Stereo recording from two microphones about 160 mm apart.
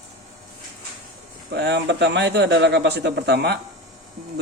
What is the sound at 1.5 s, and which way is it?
Speech, 90° right.